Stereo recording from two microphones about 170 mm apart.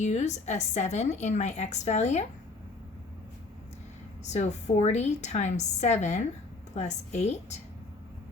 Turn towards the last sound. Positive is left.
turn(degrees=40)  # may be behind; listen again after turning